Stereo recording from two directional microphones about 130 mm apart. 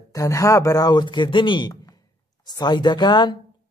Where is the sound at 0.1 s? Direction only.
25° left (ahead or behind).